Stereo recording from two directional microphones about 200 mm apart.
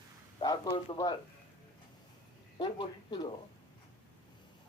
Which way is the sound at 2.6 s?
20° left (ahead or behind).